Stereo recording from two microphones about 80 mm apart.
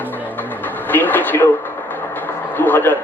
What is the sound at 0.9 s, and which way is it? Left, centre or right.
Vehicle, left.